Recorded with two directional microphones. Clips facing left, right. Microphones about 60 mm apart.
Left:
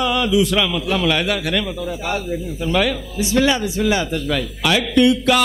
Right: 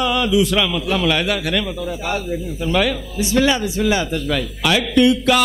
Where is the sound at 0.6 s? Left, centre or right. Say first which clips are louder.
Even; right.